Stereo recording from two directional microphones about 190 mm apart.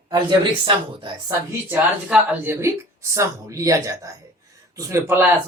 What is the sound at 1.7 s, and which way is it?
Speech, 5° right (ahead or behind).